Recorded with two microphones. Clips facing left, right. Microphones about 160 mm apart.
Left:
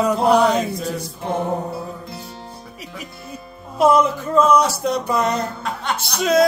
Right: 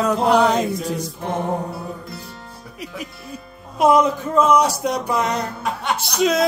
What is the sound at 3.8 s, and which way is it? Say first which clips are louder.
Child singing: even; 15° right (ahead or behind).